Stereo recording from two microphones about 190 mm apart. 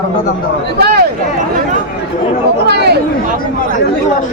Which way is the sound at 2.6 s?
60° right (ahead or behind).